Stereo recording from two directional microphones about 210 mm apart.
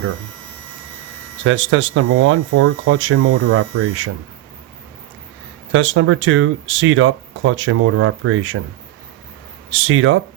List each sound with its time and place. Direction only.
1.5 s speech: 70° right (ahead or behind)
5.7 s speech: 65° right (ahead or behind)
9.6 s speech: 70° right (ahead or behind)